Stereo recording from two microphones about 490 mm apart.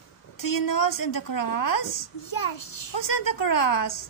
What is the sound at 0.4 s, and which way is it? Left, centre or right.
A woman's voice, left.